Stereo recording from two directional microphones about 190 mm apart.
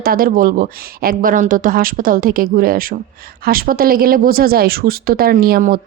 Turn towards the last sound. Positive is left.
turn(degrees=-50)  # may be behind; listen again after turning